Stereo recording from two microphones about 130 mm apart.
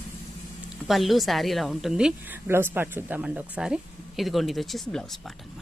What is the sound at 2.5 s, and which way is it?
Speech, 15° right (ahead or behind).